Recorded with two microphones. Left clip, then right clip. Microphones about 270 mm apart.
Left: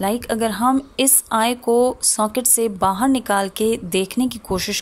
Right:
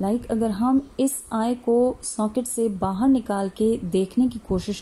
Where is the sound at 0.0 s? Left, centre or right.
Left.